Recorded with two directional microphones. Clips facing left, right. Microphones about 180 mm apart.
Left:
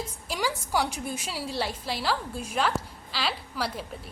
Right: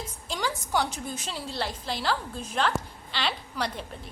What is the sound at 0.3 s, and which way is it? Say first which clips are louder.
A woman's voice: even; 10° left (ahead or behind).